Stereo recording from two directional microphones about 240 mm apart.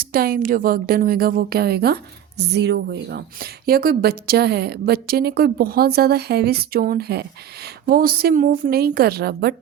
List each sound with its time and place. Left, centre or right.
0.0 s a woman's voice: right